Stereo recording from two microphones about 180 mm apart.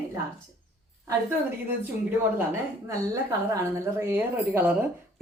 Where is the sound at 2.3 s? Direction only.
15° right (ahead or behind).